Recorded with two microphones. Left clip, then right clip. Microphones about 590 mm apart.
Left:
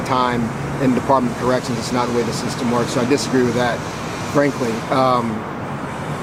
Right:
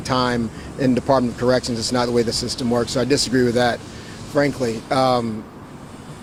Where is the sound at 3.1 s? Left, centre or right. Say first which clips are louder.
Even; right.